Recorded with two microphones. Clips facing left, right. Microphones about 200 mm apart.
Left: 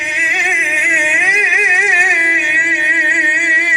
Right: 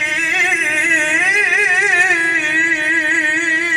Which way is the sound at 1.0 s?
15° left (ahead or behind).